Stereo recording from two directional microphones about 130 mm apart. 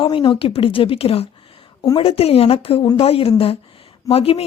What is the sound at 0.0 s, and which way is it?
Speech, 40° left (ahead or behind).